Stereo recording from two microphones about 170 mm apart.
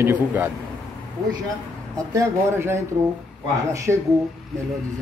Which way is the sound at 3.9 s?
10° right (ahead or behind).